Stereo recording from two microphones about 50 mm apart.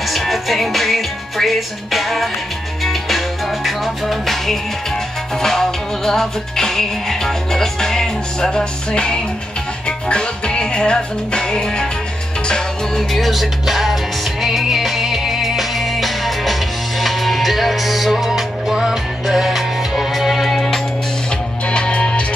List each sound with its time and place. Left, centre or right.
0.0 s music: centre
13.1 s music: centre
21.6 s music: centre